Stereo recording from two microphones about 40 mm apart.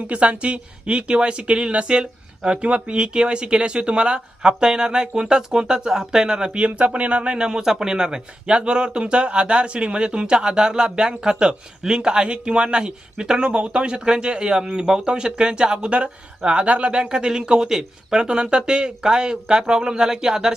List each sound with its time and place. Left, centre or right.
0.1 s speech: right
16.9 s speech: centre